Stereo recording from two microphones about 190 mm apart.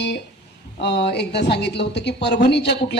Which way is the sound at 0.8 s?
65° left (ahead or behind).